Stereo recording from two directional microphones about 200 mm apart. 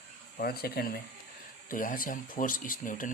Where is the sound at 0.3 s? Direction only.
50° left (ahead or behind).